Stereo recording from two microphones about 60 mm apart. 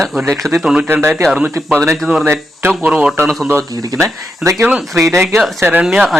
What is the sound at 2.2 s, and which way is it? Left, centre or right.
Speech, right.